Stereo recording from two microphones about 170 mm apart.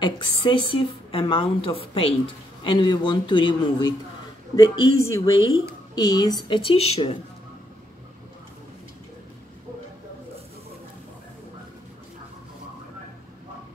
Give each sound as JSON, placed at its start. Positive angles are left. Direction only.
{"t": 0.0, "sound": "speech", "side_deg": 25}
{"t": 5.0, "sound": "speech", "side_deg": 20}